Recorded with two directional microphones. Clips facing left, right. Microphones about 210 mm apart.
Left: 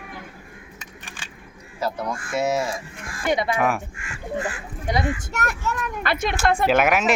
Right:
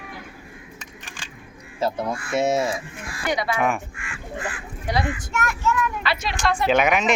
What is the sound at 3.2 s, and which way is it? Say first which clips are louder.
Speech: left 2 dB; 25° left (ahead or behind).